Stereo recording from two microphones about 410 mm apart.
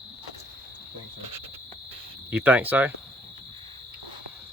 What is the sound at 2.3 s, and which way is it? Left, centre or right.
Speech, centre.